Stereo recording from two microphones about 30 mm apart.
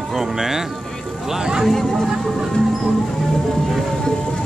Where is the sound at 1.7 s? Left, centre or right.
Centre.